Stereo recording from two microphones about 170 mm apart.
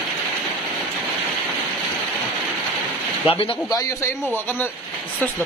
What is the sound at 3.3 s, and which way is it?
Speech, 30° left (ahead or behind).